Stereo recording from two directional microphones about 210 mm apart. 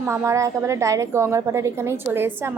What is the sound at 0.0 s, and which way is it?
A woman's voice, 10° right (ahead or behind).